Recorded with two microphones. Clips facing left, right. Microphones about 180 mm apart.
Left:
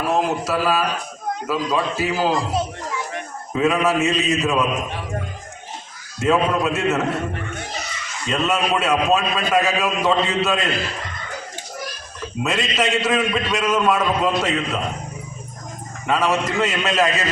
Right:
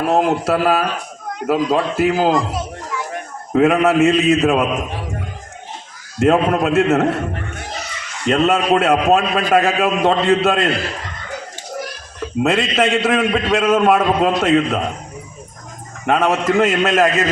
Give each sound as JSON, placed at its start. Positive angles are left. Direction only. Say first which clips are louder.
{"t": 0.1, "sound": "a man's voice", "louder": "right 5 dB", "side_deg": -60}
{"t": 3.5, "sound": "a man's voice", "louder": "right 5 dB", "side_deg": -55}
{"t": 6.1, "sound": "a man's voice", "louder": "right 4 dB", "side_deg": -55}
{"t": 12.4, "sound": "a man's voice", "louder": "right 6 dB", "side_deg": -55}
{"t": 16.0, "sound": "a man's voice", "louder": "right 4 dB", "side_deg": -55}